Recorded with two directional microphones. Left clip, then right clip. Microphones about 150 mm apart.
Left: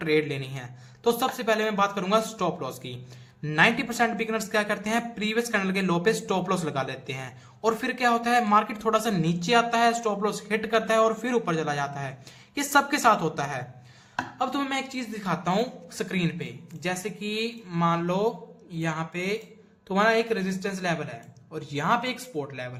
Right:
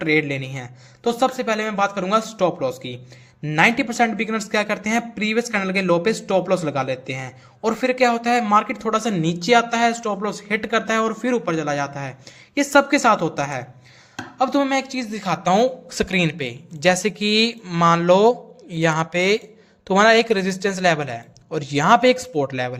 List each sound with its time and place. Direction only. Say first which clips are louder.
0.0 s speech: right 5 dB; 30° right (ahead or behind); by 22.8 s 60° right (ahead or behind)